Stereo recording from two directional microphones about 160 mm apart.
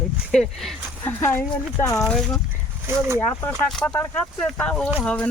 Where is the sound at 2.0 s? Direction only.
5° left (ahead or behind).